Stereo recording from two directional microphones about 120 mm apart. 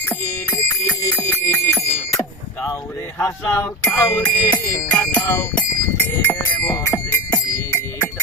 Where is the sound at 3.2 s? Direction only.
20° left (ahead or behind).